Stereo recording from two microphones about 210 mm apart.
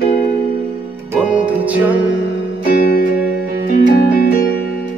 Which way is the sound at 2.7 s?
45° left (ahead or behind).